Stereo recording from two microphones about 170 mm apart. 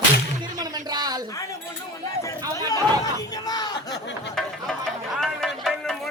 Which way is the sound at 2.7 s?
20° left (ahead or behind).